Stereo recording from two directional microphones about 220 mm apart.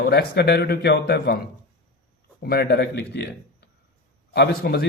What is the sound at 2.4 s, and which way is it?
Speech, 45° left (ahead or behind).